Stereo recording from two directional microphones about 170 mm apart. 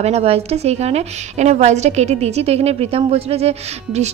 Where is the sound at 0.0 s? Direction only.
35° right (ahead or behind).